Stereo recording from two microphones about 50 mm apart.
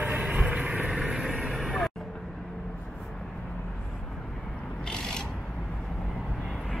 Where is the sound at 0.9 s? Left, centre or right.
Centre.